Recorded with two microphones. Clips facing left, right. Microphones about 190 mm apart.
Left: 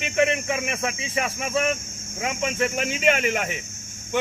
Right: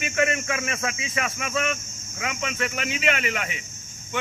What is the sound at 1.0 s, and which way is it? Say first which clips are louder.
Speech: left 2 dB; 30° left (ahead or behind).